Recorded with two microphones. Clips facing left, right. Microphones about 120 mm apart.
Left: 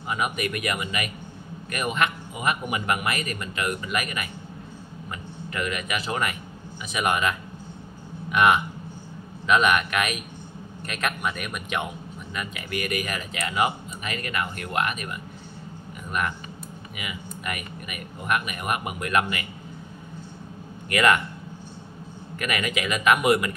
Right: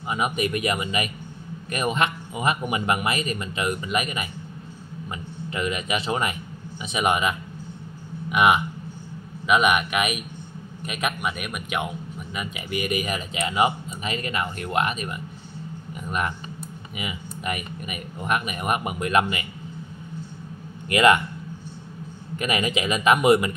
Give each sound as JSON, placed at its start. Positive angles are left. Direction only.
{"t": 0.1, "sound": "speech", "side_deg": -25}
{"t": 5.5, "sound": "a man's voice", "side_deg": -20}
{"t": 12.4, "sound": "speech", "side_deg": -20}
{"t": 20.9, "sound": "speech", "side_deg": -20}
{"t": 22.4, "sound": "speech", "side_deg": -25}